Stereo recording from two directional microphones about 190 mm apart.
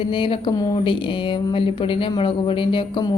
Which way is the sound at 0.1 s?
25° left (ahead or behind).